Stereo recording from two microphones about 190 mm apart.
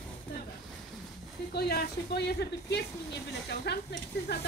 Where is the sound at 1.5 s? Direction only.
55° left (ahead or behind).